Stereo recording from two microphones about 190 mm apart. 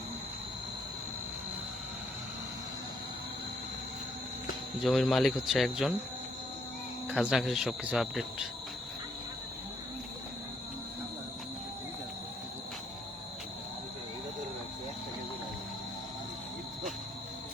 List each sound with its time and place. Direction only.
4.8 s speech: centre (ahead or behind)
7.1 s speech: 5° right (ahead or behind)